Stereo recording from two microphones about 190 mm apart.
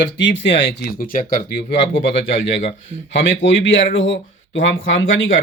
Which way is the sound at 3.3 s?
75° left (ahead or behind).